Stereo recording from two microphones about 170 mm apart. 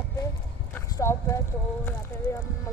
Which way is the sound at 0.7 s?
15° left (ahead or behind).